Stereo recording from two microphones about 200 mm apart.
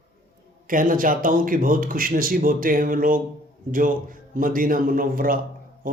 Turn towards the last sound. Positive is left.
turn(degrees=-45)  # may be behind; listen again after turning